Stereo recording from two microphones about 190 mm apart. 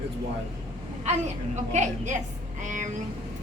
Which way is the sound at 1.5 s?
35° right (ahead or behind).